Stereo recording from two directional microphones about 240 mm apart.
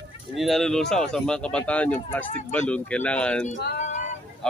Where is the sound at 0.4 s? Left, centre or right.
Centre.